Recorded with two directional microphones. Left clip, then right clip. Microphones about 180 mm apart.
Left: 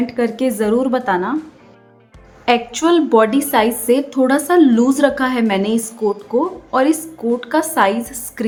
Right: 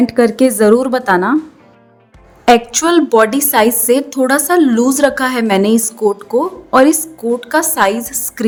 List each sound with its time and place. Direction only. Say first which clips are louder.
0.0 s a woman's voice: right 7 dB; 35° right (ahead or behind)
2.4 s a woman's voice: right 5 dB; 35° right (ahead or behind)